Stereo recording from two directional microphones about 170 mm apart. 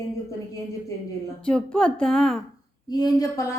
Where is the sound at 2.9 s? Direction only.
20° left (ahead or behind).